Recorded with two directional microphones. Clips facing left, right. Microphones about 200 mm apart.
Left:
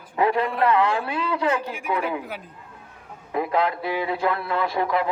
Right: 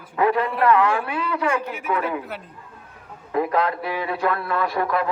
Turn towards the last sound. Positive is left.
turn(degrees=20)  # may be behind; listen again after turning